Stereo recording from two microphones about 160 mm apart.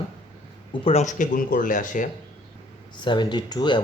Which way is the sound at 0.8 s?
45° left (ahead or behind).